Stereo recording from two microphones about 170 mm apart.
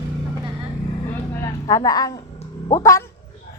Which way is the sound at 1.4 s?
20° left (ahead or behind).